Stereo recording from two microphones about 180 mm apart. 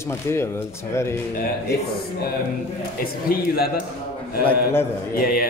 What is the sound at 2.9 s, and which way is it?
Speech, 55° left (ahead or behind).